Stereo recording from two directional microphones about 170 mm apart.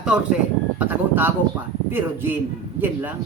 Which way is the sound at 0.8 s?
10° right (ahead or behind).